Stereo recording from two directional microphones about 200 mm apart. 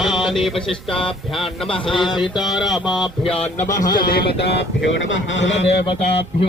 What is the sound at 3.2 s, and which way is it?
Speech, 30° left (ahead or behind).